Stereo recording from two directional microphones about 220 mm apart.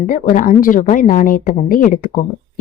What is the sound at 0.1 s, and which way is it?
Speech, 35° left (ahead or behind).